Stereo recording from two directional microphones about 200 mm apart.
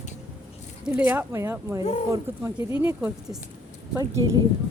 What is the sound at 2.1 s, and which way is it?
Speech, 15° right (ahead or behind).